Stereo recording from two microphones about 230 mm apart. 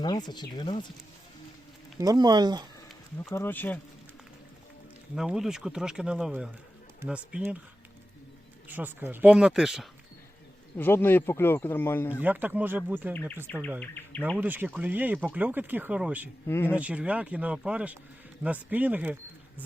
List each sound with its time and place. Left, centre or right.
0.0 s speech: centre
2.0 s speech: centre
3.2 s speech: centre
5.1 s speech: centre
8.6 s speech: centre
10.8 s speech: centre
12.2 s speech: centre
13.7 s insect: centre
14.3 s speech: centre
16.5 s speech: centre
16.7 s speech: centre